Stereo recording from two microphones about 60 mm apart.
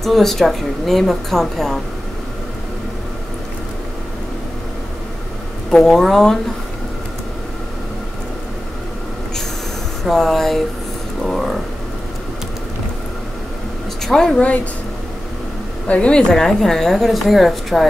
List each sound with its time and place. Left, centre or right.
0.0 s a woman's voice: centre
5.7 s speech: centre
10.0 s a woman's voice: centre
14.0 s speech: centre
14.4 s speech: left
15.9 s speech: centre